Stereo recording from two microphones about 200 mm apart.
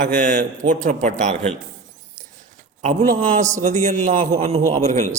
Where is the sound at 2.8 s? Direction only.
35° right (ahead or behind).